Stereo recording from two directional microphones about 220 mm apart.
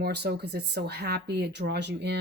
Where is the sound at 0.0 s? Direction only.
45° right (ahead or behind).